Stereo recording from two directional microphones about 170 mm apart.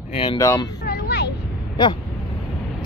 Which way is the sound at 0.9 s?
80° left.